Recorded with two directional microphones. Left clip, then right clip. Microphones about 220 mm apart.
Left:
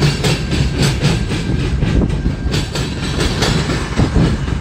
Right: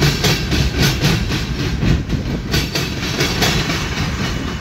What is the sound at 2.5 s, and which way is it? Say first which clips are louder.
Train: right 2 dB; 30° right (ahead or behind).